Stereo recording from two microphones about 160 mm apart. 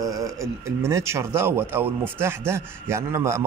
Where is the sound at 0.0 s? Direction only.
20° right (ahead or behind).